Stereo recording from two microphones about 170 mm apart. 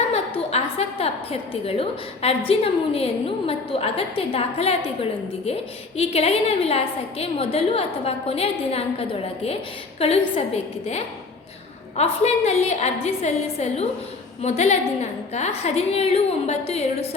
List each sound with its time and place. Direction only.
0.1 s a woman's voice: 40° left (ahead or behind)
6.0 s a woman's voice: 35° left (ahead or behind)